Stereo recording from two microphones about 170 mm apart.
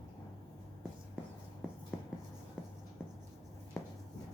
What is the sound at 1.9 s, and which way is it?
Writing, centre (ahead or behind).